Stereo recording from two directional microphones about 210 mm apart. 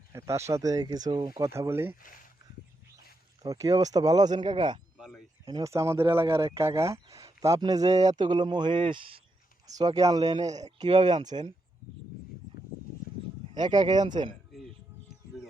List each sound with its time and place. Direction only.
0.1 s speech: 15° right (ahead or behind)
3.4 s speech: 15° right (ahead or behind)
4.9 s a sound: 5° right (ahead or behind)
5.5 s speech: 15° right (ahead or behind)
13.5 s speech: 20° right (ahead or behind)